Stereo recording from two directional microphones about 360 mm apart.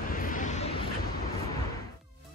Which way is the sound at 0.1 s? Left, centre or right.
Left.